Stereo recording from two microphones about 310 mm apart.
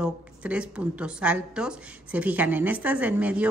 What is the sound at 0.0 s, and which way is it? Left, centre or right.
A woman's voice, centre.